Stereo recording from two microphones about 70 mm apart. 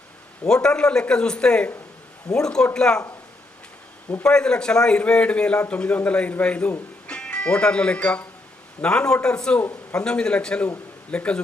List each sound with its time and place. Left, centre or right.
0.4 s a man's voice: centre
4.2 s a man's voice: centre